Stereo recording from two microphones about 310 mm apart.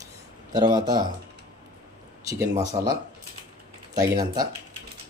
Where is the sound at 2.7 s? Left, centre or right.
Centre.